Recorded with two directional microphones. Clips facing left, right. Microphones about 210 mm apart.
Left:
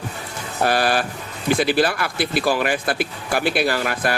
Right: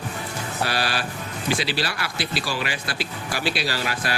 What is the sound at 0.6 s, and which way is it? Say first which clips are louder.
Speech: left 8 dB; 50° left (ahead or behind).